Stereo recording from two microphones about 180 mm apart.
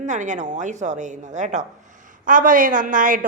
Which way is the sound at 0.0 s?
45° right (ahead or behind).